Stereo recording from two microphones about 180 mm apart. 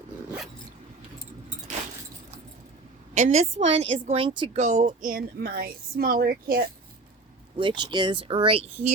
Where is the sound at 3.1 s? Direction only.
40° right (ahead or behind).